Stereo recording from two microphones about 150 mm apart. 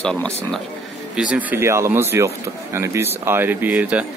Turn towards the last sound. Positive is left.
turn(degrees=-10)  # may be behind; listen again after turning